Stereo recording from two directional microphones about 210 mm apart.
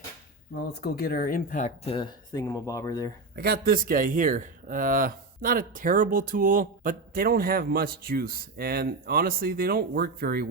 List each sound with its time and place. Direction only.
0.5 s speech: 50° left (ahead or behind); by 3.1 s 15° left (ahead or behind)
3.3 s speech: 45° right (ahead or behind)